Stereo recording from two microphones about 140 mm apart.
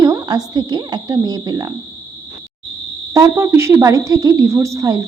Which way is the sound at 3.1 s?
20° right (ahead or behind).